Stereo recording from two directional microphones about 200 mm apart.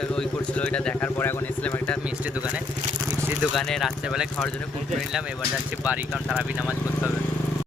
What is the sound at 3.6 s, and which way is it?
Speech, centre (ahead or behind).